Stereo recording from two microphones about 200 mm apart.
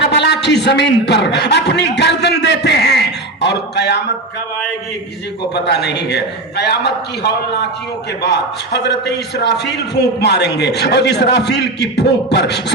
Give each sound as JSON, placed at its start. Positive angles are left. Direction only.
{"t": 0.1, "sound": "a man's voice", "side_deg": 60}
{"t": 5.5, "sound": "a man's voice", "side_deg": 55}